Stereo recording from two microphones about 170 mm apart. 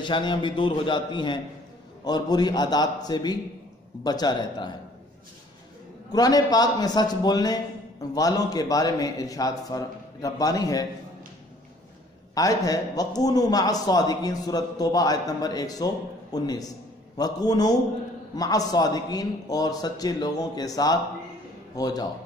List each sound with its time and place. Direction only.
0.0 s a man's voice: 25° left (ahead or behind)
6.1 s a man's voice: 20° left (ahead or behind)
12.4 s a man's voice: 20° left (ahead or behind)